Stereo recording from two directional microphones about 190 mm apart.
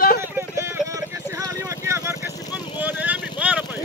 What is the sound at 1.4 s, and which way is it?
Vehicle, 15° right (ahead or behind).